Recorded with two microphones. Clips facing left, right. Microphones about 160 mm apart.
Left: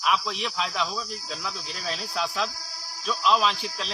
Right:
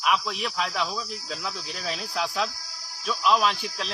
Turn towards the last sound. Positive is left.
turn(degrees=-10)  # may be behind; listen again after turning